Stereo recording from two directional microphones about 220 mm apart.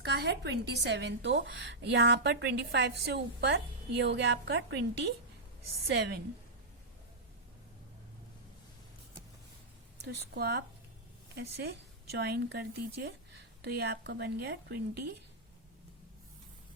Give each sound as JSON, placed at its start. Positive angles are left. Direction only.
{"t": 0.0, "sound": "a woman's voice", "side_deg": -50}
{"t": 5.9, "sound": "a woman's voice", "side_deg": -45}
{"t": 10.3, "sound": "a woman's voice", "side_deg": -45}